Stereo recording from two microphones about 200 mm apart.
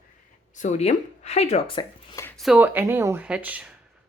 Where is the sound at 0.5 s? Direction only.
35° left (ahead or behind).